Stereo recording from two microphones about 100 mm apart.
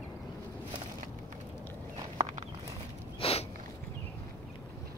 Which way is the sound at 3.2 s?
75° left (ahead or behind).